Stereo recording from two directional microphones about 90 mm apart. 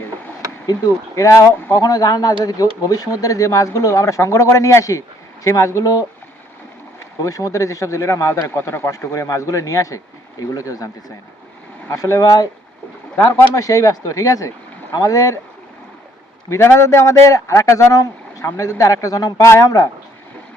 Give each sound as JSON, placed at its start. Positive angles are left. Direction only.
{"t": 0.7, "sound": "speech", "side_deg": 40}
{"t": 7.2, "sound": "speech", "side_deg": 40}
{"t": 11.9, "sound": "speech", "side_deg": 30}
{"t": 12.2, "sound": "speech", "side_deg": 40}
{"t": 16.5, "sound": "speech", "side_deg": 30}